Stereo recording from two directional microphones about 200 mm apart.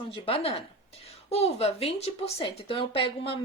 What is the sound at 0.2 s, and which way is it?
A woman's voice, 30° left (ahead or behind).